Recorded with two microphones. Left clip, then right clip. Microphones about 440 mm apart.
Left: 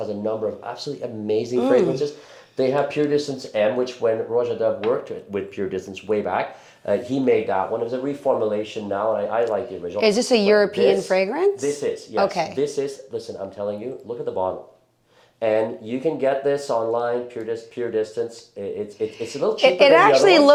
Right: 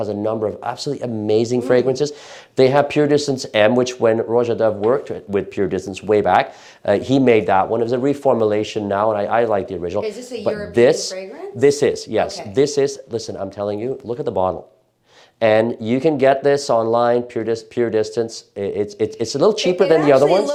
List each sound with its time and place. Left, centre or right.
0.0 s speech: right
5.3 s speech: right
10.0 s speech: left
11.6 s speech: right
12.5 s speech: right
19.8 s speech: left